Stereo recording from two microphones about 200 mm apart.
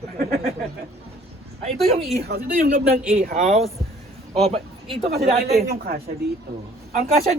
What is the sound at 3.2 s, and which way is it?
Speech, 35° right (ahead or behind).